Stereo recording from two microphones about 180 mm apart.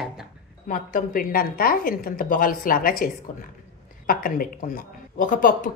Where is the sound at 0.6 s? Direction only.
45° left (ahead or behind).